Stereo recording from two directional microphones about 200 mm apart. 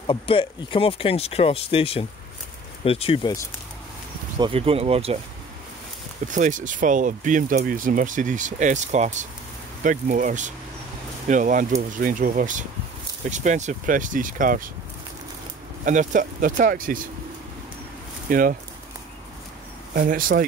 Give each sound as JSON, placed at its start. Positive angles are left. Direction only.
{"t": 0.0, "sound": "speech", "side_deg": 25}
{"t": 4.4, "sound": "speech", "side_deg": -30}
{"t": 6.2, "sound": "speech", "side_deg": -40}
{"t": 15.8, "sound": "speech", "side_deg": -40}
{"t": 18.3, "sound": "speech", "side_deg": -45}
{"t": 19.9, "sound": "speech", "side_deg": -45}